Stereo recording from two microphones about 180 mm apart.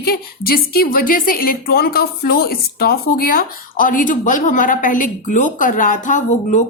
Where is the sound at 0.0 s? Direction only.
55° left (ahead or behind).